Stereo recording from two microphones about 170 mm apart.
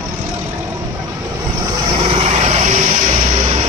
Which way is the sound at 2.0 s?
35° right (ahead or behind).